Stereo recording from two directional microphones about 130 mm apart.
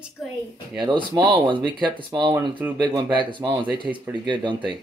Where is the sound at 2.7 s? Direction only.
35° right (ahead or behind).